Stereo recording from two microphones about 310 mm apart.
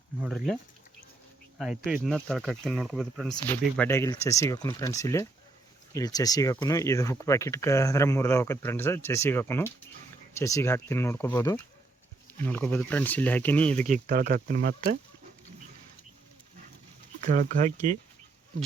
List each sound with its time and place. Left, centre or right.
0.2 s speech: centre
13.8 s speech: right
17.2 s speech: right